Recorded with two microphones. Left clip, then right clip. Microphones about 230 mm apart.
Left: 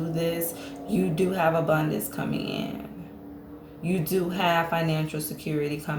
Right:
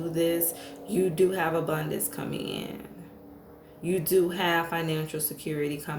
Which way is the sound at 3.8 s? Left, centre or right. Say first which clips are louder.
Right 3 dB; right.